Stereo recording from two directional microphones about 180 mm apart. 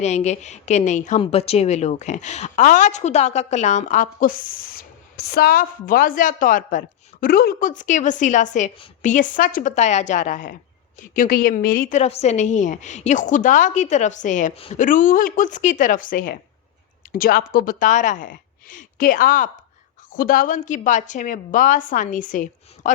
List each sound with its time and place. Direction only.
0.0 s a woman's voice: 40° left (ahead or behind)